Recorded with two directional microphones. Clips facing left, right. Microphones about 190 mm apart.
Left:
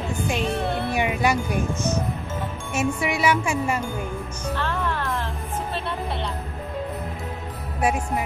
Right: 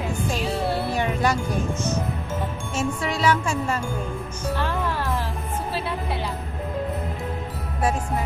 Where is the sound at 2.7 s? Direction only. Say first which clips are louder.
Left 3 dB; 10° left (ahead or behind).